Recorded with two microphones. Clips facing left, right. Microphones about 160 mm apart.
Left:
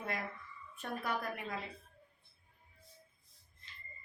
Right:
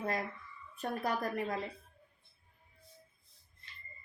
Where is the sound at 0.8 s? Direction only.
40° right (ahead or behind).